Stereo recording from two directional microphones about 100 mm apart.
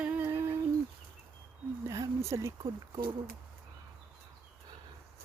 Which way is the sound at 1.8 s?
30° right (ahead or behind).